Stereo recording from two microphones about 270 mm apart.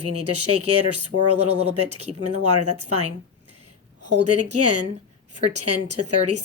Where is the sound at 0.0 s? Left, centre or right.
Right.